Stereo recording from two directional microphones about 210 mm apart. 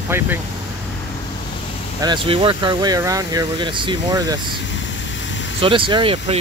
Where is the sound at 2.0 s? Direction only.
25° right (ahead or behind).